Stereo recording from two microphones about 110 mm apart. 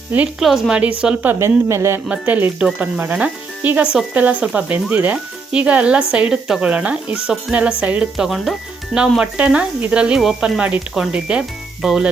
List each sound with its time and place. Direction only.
0.3 s speech: 5° right (ahead or behind)
0.8 s speech: 15° right (ahead or behind)
1.4 s speech: 25° right (ahead or behind)
2.0 s speech: 15° right (ahead or behind)